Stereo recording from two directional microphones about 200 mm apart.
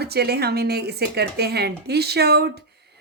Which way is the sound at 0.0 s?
55° right (ahead or behind).